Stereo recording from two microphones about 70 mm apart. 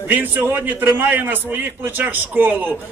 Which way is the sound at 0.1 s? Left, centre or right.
Right.